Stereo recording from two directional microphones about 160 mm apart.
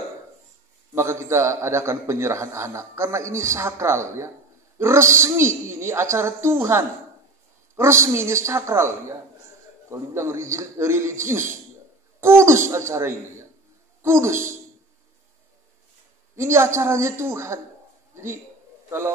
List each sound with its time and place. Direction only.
0.9 s a man's voice: 15° right (ahead or behind)
16.3 s a man's voice: 15° right (ahead or behind)
18.1 s a sound: 15° right (ahead or behind)